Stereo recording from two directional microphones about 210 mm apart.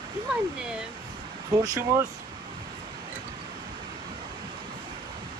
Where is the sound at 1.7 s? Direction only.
15° right (ahead or behind).